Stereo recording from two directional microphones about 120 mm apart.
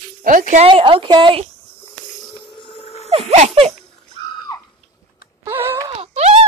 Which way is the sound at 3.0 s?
65° right (ahead or behind).